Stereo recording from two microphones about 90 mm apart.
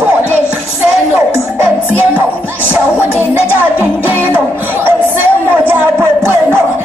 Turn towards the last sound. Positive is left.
turn(degrees=-25)  # may be behind; listen again after turning